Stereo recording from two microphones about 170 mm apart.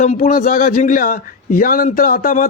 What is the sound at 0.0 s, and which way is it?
Speech, 50° left (ahead or behind).